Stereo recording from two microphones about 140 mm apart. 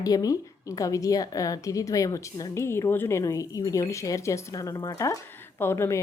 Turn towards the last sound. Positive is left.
turn(degrees=20)  # may be behind; listen again after turning